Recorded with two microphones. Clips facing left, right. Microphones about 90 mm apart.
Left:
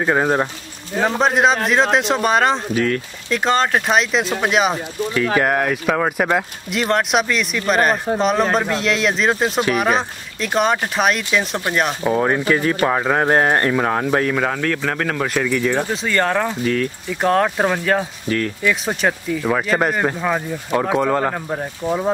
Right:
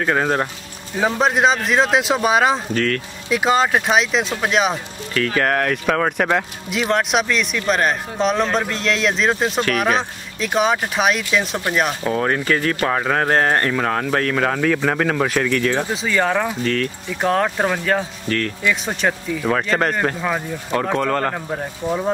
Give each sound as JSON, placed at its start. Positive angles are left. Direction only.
{"t": 0.0, "sound": "speech", "side_deg": 15}
{"t": 1.0, "sound": "speech", "side_deg": 0}
{"t": 2.7, "sound": "speech", "side_deg": 15}
{"t": 3.3, "sound": "speech", "side_deg": -5}
{"t": 5.1, "sound": "speech", "side_deg": 15}
{"t": 12.0, "sound": "speech", "side_deg": 15}
{"t": 14.3, "sound": "speech", "side_deg": 0}
{"t": 15.9, "sound": "speech", "side_deg": 0}
{"t": 16.6, "sound": "speech", "side_deg": 15}
{"t": 17.1, "sound": "speech", "side_deg": 0}